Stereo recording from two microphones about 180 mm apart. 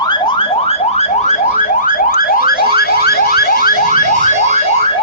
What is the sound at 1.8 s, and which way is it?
Car alarm, 50° left (ahead or behind).